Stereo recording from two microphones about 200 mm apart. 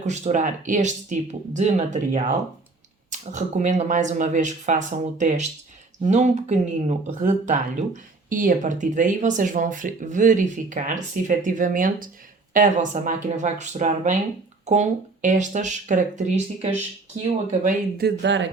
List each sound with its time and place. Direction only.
0.0 s speech: 35° right (ahead or behind)
17.9 s speech: 55° right (ahead or behind)